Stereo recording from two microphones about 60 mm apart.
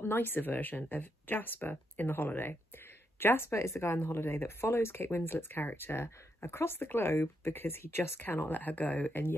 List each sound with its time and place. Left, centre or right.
0.0 s speech: left